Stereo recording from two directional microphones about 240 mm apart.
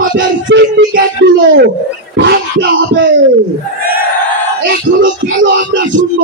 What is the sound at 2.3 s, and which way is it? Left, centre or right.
Speech, right.